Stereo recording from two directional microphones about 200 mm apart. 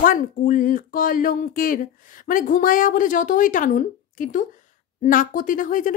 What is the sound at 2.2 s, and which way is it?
Speech, 45° left (ahead or behind).